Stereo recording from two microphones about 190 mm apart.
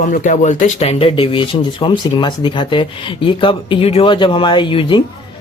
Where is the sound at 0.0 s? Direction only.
45° left (ahead or behind); by 5.0 s 25° left (ahead or behind).